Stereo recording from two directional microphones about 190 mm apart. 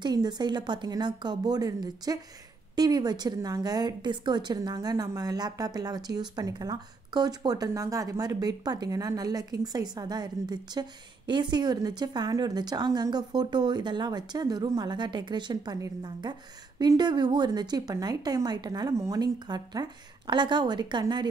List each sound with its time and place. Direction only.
0.0 s a woman's voice: 20° right (ahead or behind)